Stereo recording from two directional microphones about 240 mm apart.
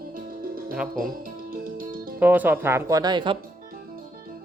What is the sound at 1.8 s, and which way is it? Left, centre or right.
Music, right.